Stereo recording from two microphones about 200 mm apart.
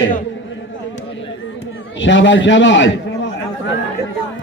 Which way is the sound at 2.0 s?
65° left (ahead or behind).